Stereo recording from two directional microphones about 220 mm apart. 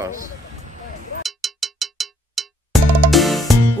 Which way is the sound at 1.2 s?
Centre (ahead or behind).